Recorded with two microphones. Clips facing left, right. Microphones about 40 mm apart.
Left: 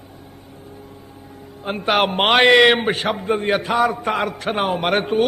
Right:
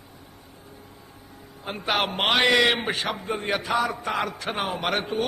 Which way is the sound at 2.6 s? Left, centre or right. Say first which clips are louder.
Left 8 dB; left.